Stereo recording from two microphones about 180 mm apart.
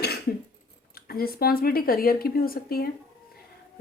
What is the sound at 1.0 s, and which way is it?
A woman's voice, 55° left (ahead or behind).